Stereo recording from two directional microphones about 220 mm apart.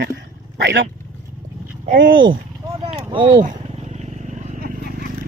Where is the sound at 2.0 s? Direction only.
55° right (ahead or behind).